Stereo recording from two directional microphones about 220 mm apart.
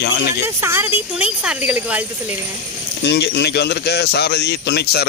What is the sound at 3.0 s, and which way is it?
Speech, 50° left (ahead or behind).